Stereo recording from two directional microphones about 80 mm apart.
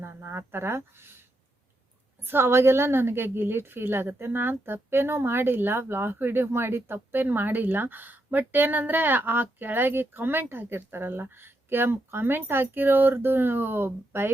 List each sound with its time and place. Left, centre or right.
0.0 s a woman's voice: right